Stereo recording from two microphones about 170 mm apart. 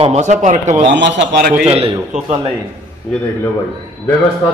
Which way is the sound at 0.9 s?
90° right.